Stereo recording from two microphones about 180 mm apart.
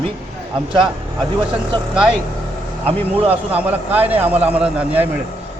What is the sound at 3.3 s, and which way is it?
A man's voice, 10° right (ahead or behind).